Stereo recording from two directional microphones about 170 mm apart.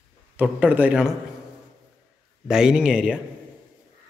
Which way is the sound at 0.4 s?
10° right (ahead or behind).